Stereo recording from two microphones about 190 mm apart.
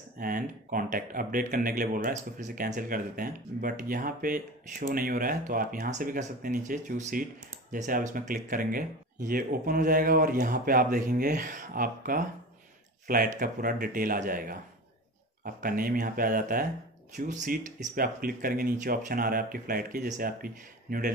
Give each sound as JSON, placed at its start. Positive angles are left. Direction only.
{"t": 0.2, "sound": "speech", "side_deg": -45}